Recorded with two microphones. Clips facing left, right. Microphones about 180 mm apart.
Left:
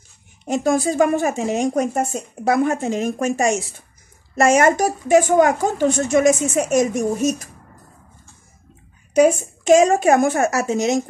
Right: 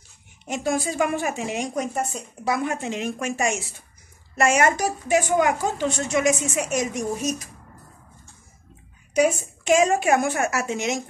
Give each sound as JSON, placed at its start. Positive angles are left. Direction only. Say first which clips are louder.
{"t": 0.5, "sound": "speech", "louder": "left 6 dB", "side_deg": 40}
{"t": 9.1, "sound": "speech", "louder": "left 6 dB", "side_deg": 40}